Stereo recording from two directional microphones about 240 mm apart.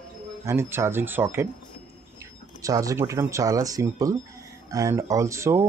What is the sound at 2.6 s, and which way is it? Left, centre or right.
Speech, centre.